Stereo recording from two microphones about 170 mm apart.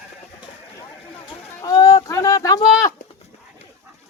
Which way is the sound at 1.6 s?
20° left (ahead or behind).